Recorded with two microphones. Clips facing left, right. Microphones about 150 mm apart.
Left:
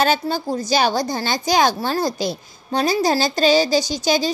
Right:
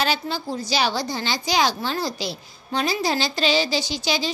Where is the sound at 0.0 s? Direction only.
45° left (ahead or behind).